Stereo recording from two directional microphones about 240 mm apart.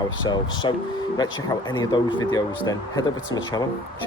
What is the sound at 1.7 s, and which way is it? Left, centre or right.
Speech, centre.